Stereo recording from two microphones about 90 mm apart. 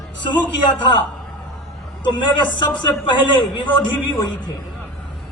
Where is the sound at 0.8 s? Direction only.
60° left (ahead or behind).